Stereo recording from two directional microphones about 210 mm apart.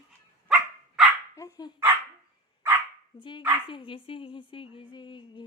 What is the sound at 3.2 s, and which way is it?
A woman's voice, 25° left (ahead or behind).